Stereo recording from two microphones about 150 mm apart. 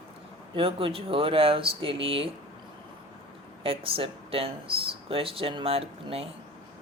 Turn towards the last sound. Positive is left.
turn(degrees=-40)  # may be behind; listen again after turning